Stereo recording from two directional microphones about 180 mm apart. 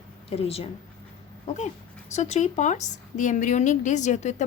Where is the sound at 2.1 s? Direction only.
40° left (ahead or behind).